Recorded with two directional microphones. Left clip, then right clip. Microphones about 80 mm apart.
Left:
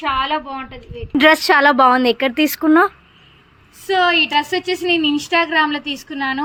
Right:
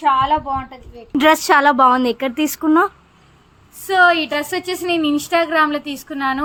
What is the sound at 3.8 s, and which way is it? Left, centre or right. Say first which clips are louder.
A woman's voice: right 1 dB; right.